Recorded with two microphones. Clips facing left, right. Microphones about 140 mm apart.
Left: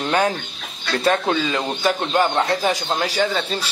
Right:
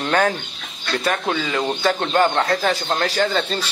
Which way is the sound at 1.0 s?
30° left (ahead or behind).